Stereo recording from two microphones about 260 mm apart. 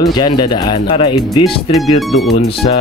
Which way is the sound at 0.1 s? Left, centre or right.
Centre.